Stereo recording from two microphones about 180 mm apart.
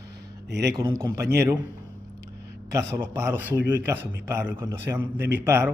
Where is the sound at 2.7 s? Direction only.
15° right (ahead or behind).